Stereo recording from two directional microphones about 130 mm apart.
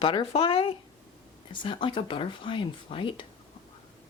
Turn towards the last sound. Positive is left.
turn(degrees=40)  # may be behind; listen again after turning